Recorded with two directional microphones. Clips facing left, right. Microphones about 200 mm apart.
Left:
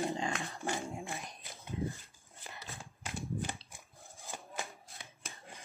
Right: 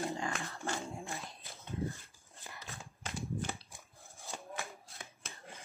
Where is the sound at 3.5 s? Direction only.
15° left (ahead or behind).